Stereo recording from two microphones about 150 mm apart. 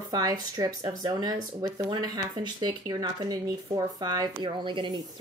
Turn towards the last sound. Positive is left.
turn(degrees=-30)  # may be behind; listen again after turning